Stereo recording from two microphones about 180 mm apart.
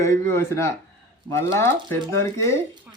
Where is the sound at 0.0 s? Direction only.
15° left (ahead or behind).